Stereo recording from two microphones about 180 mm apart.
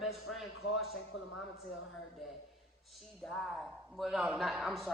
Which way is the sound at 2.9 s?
Centre (ahead or behind).